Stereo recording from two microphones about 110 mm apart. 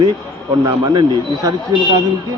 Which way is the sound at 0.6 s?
35° right (ahead or behind).